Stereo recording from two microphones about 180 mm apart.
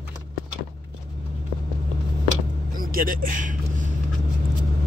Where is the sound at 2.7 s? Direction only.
50° right (ahead or behind).